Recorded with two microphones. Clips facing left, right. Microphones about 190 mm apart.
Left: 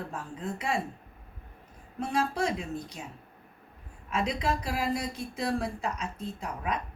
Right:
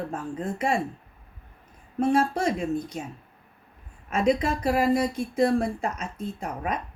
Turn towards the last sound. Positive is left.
turn(degrees=-50)  # may be behind; listen again after turning